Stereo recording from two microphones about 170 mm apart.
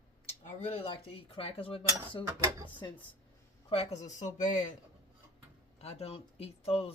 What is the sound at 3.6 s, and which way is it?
Speech, 35° left (ahead or behind).